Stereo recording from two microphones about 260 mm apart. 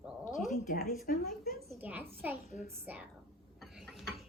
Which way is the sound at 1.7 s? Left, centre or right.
Centre.